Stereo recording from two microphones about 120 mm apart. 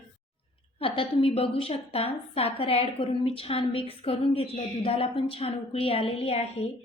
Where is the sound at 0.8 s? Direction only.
50° left (ahead or behind).